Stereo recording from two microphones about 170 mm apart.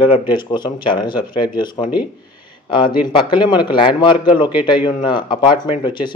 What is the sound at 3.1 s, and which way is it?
Speech, 30° left (ahead or behind).